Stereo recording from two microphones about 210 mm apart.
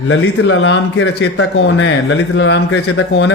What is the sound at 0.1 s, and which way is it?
A man's voice, 60° left (ahead or behind).